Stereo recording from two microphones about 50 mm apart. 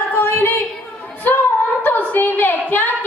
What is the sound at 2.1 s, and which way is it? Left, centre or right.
Speech, left.